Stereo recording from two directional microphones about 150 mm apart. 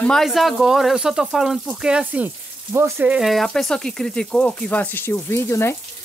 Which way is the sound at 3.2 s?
Centre (ahead or behind).